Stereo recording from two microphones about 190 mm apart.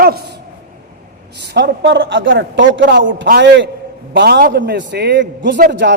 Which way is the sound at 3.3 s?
60° right (ahead or behind).